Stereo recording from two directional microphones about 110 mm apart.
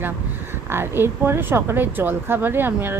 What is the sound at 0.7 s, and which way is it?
A woman's voice, 20° right (ahead or behind).